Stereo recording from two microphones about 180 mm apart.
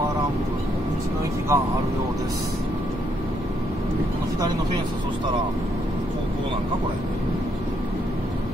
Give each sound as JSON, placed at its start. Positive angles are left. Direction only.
{"t": 1.5, "sound": "speech", "side_deg": -15}